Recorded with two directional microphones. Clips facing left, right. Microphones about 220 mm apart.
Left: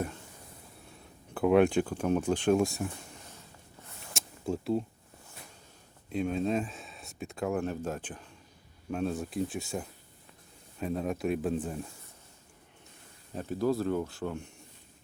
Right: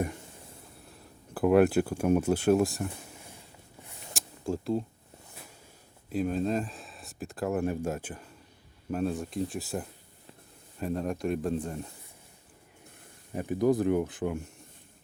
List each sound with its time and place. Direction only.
0.9 s speech: 5° right (ahead or behind)
4.1 s a sound: centre (ahead or behind)
6.1 s speech: 5° right (ahead or behind)
13.3 s speech: 15° right (ahead or behind)